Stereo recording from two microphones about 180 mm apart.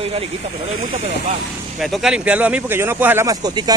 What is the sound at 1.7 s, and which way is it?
Speech, centre (ahead or behind).